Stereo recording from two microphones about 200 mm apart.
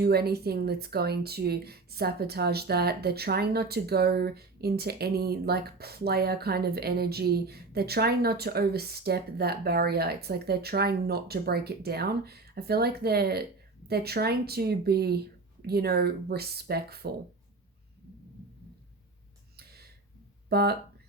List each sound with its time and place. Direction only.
0.0 s speech: 50° right (ahead or behind)
19.5 s a sound: 50° right (ahead or behind)
20.5 s speech: 50° right (ahead or behind)